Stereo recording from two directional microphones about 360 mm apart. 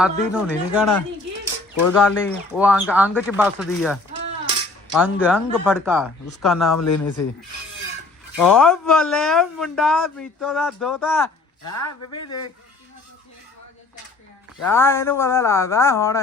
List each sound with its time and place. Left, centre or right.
0.0 s speech: centre
1.9 s speech: centre
6.7 s speech: left
8.4 s speech: centre
11.8 s speech: left
14.6 s speech: centre